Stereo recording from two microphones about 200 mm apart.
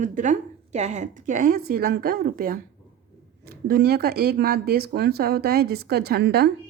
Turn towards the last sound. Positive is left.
turn(degrees=-55)  # may be behind; listen again after turning